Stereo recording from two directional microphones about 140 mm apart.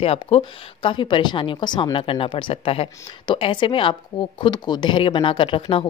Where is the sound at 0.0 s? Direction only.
45° left (ahead or behind).